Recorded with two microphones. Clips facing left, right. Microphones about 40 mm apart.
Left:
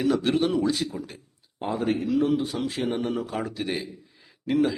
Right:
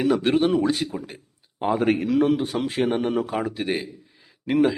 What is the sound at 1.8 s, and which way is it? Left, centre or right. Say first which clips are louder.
A man's voice: right 3 dB; right.